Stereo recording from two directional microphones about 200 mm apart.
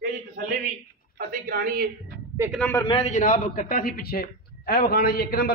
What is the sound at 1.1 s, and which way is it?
Speech, 50° right (ahead or behind).